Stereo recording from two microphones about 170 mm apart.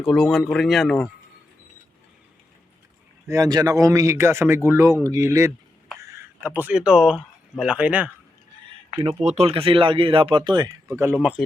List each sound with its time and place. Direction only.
0.0 s speech: centre (ahead or behind)
3.2 s speech: 20° right (ahead or behind)
9.0 s speech: 35° right (ahead or behind)
10.8 s speech: 10° right (ahead or behind)